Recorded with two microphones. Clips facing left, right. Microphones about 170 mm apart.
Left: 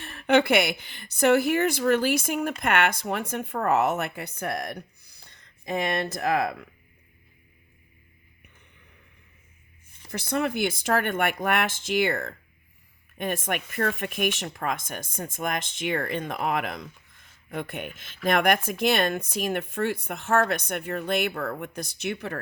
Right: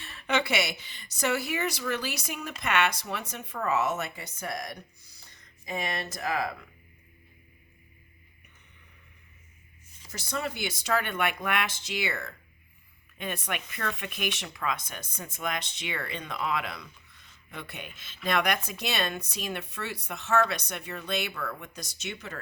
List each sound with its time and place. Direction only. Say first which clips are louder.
0.0 s a woman's voice: left 8 dB; 50° left (ahead or behind)
10.0 s speech: left 7 dB; 60° left (ahead or behind)